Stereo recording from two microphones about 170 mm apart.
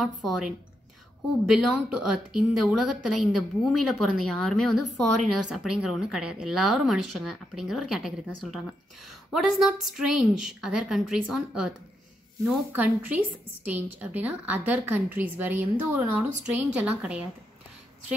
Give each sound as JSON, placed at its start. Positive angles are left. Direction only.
{"t": 0.0, "sound": "a woman's voice", "side_deg": 0}
{"t": 12.7, "sound": "a woman's voice", "side_deg": -10}